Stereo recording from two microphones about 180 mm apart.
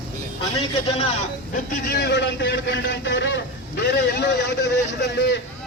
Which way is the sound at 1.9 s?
70° left (ahead or behind).